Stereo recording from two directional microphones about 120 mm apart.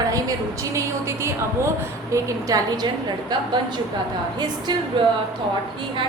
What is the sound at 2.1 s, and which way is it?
A woman's voice, 25° right (ahead or behind).